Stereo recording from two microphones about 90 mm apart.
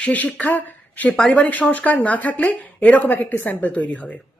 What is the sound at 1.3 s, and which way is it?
A woman's voice, 15° left (ahead or behind).